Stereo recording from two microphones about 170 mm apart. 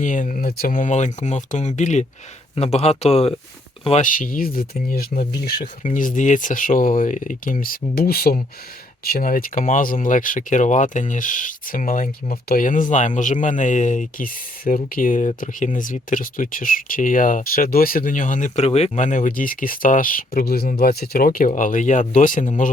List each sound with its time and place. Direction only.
0.0 s speech: 50° left (ahead or behind)
4.0 s speech: 55° left (ahead or behind)